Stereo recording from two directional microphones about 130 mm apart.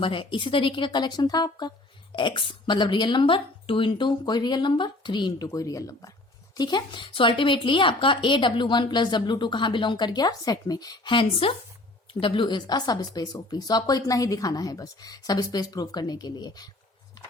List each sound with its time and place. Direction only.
0.0 s speech: 40° left (ahead or behind)
5.5 s speech: 25° left (ahead or behind)